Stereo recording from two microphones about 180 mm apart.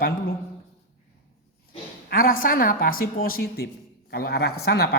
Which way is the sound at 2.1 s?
50° left (ahead or behind).